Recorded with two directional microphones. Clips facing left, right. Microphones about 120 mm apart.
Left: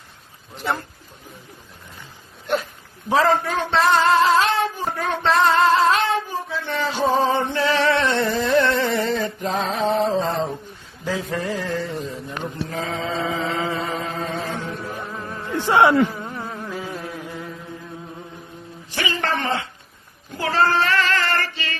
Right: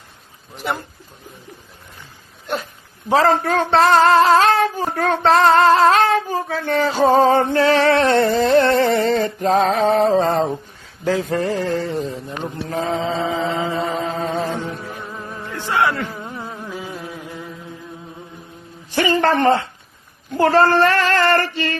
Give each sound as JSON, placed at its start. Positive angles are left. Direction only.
{"t": 0.5, "sound": "a man's voice", "side_deg": -5}
{"t": 3.1, "sound": "music", "side_deg": -35}
{"t": 3.4, "sound": "female singing", "side_deg": -50}
{"t": 4.9, "sound": "child singing", "side_deg": -40}
{"t": 6.5, "sound": "music", "side_deg": -45}
{"t": 11.0, "sound": "speech", "side_deg": -55}
{"t": 11.3, "sound": "music", "side_deg": -40}
{"t": 12.7, "sound": "mantra", "side_deg": -30}
{"t": 14.3, "sound": "music", "side_deg": -20}
{"t": 14.8, "sound": "music", "side_deg": 0}
{"t": 15.4, "sound": "a sound", "side_deg": 20}
{"t": 16.2, "sound": "a sound", "side_deg": -5}
{"t": 18.9, "sound": "a sound", "side_deg": -45}